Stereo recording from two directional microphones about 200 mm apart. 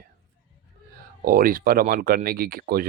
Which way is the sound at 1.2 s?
45° right (ahead or behind).